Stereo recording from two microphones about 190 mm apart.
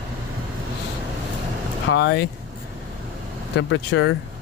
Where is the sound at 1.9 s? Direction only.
70° left (ahead or behind).